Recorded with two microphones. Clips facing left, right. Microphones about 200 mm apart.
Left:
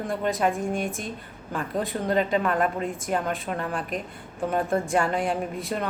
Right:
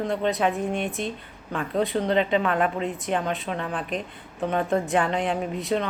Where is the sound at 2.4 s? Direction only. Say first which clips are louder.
Right 1 dB; centre (ahead or behind).